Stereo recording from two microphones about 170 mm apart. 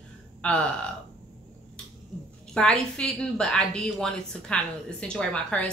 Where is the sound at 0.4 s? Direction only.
5° left (ahead or behind).